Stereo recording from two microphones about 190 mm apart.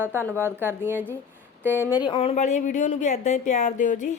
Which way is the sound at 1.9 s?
25° left (ahead or behind).